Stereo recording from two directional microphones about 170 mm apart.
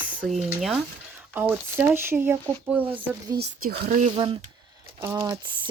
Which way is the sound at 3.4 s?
65° right (ahead or behind).